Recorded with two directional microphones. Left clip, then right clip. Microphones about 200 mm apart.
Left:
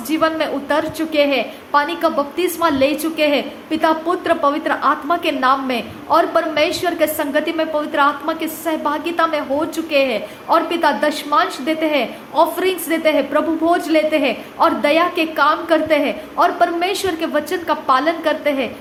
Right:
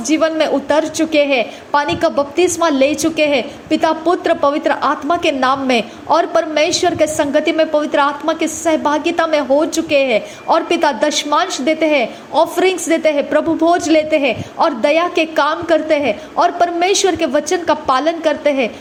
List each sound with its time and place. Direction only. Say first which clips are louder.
0.1 s a woman's voice: right 4 dB; 25° right (ahead or behind)